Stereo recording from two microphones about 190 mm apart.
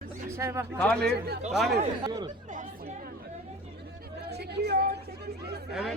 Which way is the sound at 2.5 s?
40° right (ahead or behind).